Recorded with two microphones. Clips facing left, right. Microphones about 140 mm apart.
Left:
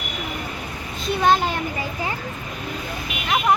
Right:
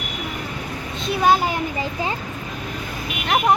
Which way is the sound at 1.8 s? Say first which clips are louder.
Right 2 dB; 20° right (ahead or behind).